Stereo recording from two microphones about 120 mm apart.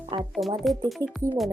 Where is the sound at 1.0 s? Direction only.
30° right (ahead or behind).